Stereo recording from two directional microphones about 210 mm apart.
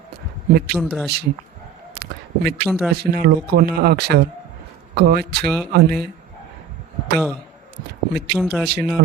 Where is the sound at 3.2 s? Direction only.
45° right (ahead or behind).